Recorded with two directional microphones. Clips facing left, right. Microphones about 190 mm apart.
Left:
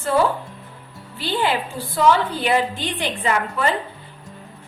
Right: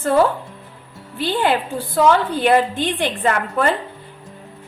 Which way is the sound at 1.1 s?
55° right (ahead or behind).